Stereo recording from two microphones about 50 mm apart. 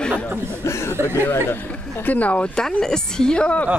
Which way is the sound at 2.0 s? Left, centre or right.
Left.